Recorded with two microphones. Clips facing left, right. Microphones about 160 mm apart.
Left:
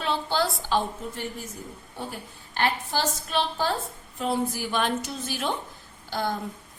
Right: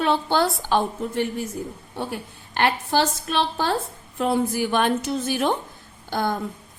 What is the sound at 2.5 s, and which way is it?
A woman's voice, 70° right (ahead or behind).